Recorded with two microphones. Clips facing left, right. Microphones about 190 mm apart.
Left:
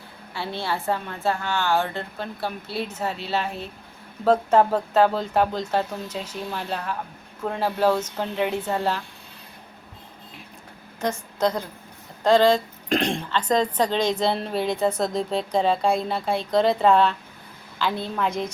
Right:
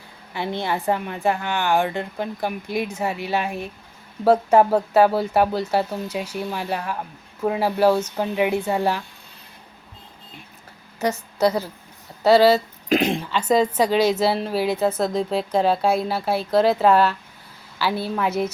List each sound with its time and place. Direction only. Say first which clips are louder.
0.3 s a woman's voice: right 3 dB; 15° right (ahead or behind)
11.0 s a woman's voice: right 3 dB; 10° right (ahead or behind)